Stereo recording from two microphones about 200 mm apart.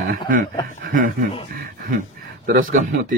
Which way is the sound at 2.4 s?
40° right (ahead or behind).